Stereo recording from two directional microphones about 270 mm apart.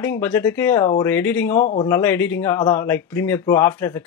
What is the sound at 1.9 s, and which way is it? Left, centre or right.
Speech, centre.